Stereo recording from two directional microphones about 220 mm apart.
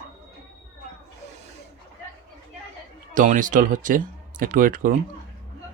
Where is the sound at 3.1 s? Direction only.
35° right (ahead or behind).